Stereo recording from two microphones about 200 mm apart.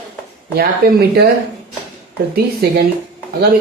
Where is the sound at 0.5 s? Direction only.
50° right (ahead or behind).